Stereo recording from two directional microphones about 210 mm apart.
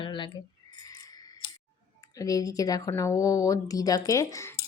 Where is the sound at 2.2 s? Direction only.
15° left (ahead or behind).